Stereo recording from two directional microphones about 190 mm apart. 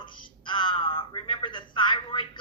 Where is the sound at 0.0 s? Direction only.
25° left (ahead or behind).